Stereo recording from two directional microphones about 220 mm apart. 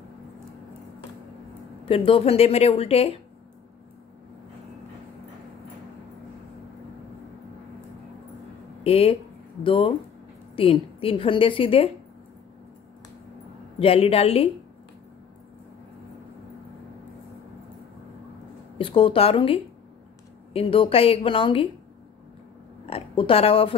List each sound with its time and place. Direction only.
1.9 s a woman's voice: 25° left (ahead or behind)
8.8 s a woman's voice: 25° left (ahead or behind)
13.7 s a woman's voice: 25° left (ahead or behind)
18.8 s a woman's voice: 25° left (ahead or behind)
22.8 s a woman's voice: 25° left (ahead or behind)